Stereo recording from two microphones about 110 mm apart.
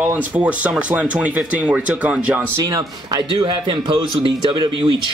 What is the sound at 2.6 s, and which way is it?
A man's voice, 35° right (ahead or behind).